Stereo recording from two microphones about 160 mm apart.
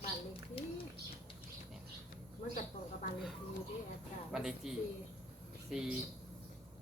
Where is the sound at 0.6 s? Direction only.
35° left (ahead or behind).